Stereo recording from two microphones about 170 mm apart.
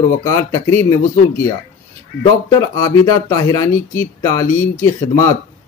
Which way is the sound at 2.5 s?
20° left (ahead or behind).